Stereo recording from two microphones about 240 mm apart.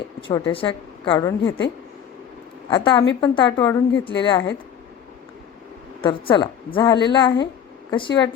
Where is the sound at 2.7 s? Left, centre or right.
Centre.